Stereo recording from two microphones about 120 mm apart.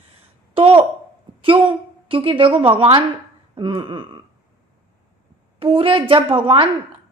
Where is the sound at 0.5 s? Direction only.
50° right (ahead or behind).